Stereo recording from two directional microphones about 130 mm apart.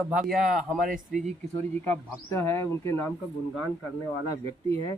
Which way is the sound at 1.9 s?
20° left (ahead or behind).